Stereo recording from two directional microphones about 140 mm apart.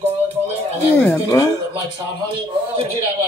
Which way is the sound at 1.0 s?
20° left (ahead or behind).